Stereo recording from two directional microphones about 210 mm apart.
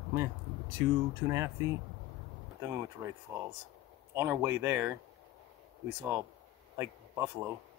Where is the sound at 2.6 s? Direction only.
10° right (ahead or behind).